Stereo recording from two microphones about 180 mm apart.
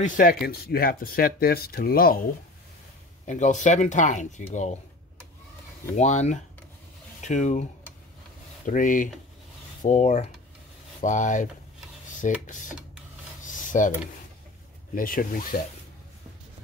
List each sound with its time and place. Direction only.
0.0 s speech: 45° left (ahead or behind)
3.3 s speech: 40° left (ahead or behind)
5.9 s speech: 40° left (ahead or behind)
8.6 s speech: 50° left (ahead or behind)
13.5 s a sound: 45° left (ahead or behind)
15.0 s speech: 50° left (ahead or behind)